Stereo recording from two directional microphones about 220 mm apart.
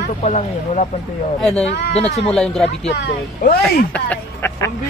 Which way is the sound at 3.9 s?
10° left (ahead or behind).